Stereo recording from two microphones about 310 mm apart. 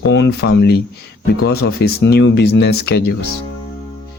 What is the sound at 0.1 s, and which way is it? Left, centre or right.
Speech, left.